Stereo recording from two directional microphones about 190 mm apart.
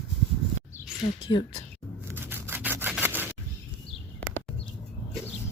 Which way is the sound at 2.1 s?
10° right (ahead or behind).